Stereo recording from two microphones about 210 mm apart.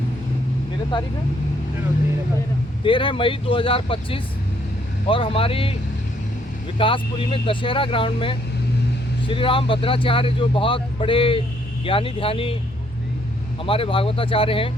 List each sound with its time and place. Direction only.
0.9 s speech: 20° left (ahead or behind)
2.8 s speech: 25° left (ahead or behind)
6.7 s speech: 25° left (ahead or behind)
13.7 s speech: 25° left (ahead or behind)